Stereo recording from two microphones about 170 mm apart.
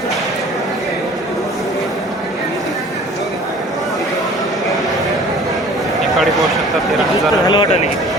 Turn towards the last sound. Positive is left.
turn(degrees=25)  # may be behind; listen again after turning